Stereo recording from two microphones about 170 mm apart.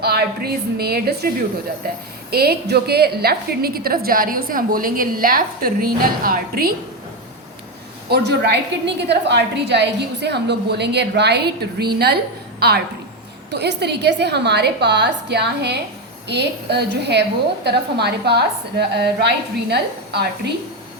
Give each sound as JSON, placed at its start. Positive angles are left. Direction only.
{"t": 0.0, "sound": "a woman's voice", "side_deg": -70}
{"t": 2.3, "sound": "a woman's voice", "side_deg": -65}
{"t": 8.1, "sound": "a woman's voice", "side_deg": -75}
{"t": 13.5, "sound": "a woman's voice", "side_deg": -80}